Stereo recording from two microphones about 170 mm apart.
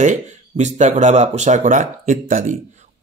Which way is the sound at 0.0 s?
45° right (ahead or behind).